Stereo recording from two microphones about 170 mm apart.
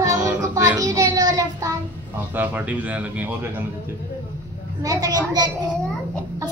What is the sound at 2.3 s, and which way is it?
Speech, 10° right (ahead or behind).